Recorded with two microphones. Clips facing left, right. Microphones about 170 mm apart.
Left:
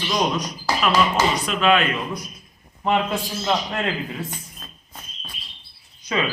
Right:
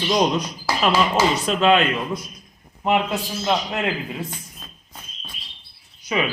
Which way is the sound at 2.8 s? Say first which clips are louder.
Right 1 dB; 15° right (ahead or behind).